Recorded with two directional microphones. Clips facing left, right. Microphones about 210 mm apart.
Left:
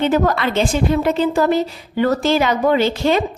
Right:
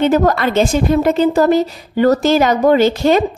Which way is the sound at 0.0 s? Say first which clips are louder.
Right 3 dB; 45° right (ahead or behind).